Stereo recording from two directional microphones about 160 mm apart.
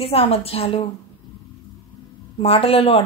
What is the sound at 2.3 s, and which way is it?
Speech, 35° left (ahead or behind).